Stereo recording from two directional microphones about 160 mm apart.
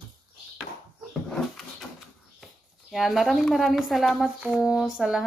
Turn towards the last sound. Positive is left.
turn(degrees=-5)  # may be behind; listen again after turning